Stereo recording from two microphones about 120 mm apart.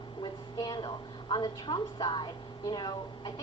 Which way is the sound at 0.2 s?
40° left (ahead or behind).